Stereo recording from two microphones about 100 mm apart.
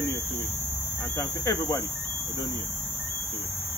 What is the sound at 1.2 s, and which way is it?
Speech, 30° left (ahead or behind).